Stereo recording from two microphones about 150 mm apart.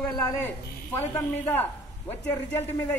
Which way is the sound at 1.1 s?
15° left (ahead or behind).